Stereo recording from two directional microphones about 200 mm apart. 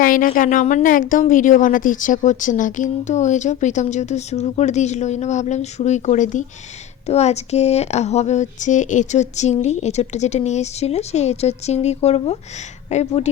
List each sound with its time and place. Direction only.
0.0 s a woman's voice: 45° left (ahead or behind)